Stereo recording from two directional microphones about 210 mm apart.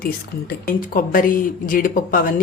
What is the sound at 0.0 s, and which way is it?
Speech, 45° left (ahead or behind).